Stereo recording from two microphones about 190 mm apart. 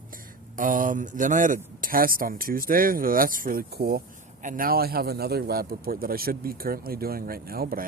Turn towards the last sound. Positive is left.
turn(degrees=-50)  # may be behind; listen again after turning